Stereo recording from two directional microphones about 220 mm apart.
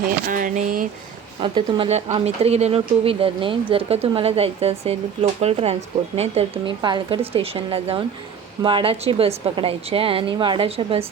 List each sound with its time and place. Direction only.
0.3 s speech: 40° right (ahead or behind)
1.4 s speech: 20° right (ahead or behind)